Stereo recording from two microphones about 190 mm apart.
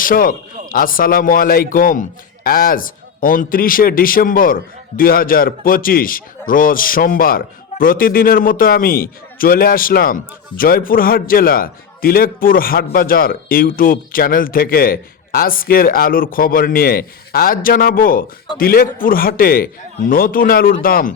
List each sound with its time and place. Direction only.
0.0 s a man's voice: 50° left (ahead or behind)